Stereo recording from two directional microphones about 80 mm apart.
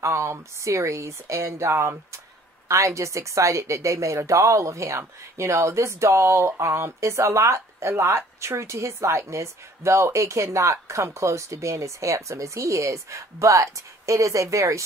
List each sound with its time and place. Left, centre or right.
0.0 s a woman's voice: right